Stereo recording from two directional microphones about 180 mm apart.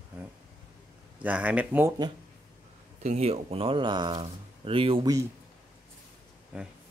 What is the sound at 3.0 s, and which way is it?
Speech, 35° right (ahead or behind).